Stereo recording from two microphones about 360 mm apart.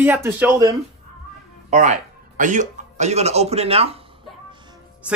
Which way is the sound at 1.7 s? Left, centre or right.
Centre.